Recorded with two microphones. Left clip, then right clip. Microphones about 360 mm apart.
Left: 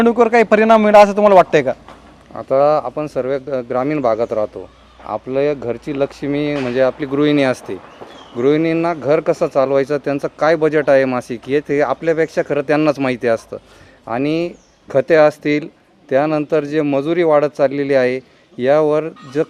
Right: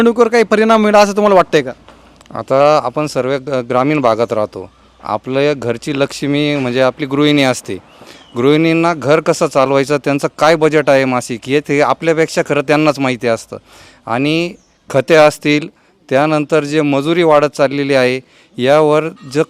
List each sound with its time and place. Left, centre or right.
0.0 s a man's voice: right
2.3 s speech: right
8.4 s speech: right